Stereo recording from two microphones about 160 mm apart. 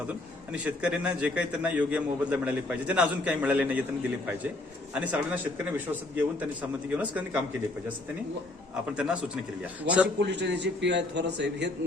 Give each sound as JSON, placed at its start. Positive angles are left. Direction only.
{"t": 0.5, "sound": "a man's voice", "side_deg": -10}
{"t": 5.1, "sound": "a man's voice", "side_deg": -10}
{"t": 9.0, "sound": "a man's voice", "side_deg": -5}
{"t": 10.2, "sound": "a man's voice", "side_deg": -90}